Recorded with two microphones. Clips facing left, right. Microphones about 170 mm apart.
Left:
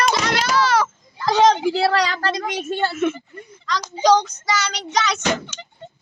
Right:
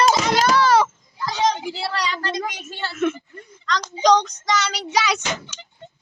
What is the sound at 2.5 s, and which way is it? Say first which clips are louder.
Speech: left 10 dB; 55° left (ahead or behind).